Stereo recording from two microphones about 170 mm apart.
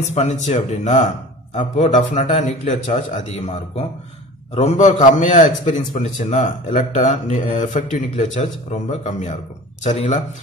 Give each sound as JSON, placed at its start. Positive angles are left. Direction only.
{"t": 0.0, "sound": "a man's voice", "side_deg": 40}